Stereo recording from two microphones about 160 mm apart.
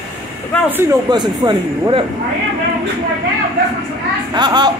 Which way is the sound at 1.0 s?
25° right (ahead or behind).